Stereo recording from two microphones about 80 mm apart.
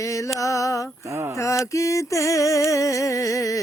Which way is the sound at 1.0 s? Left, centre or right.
Right.